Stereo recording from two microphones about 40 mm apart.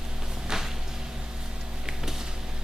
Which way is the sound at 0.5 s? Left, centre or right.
Centre.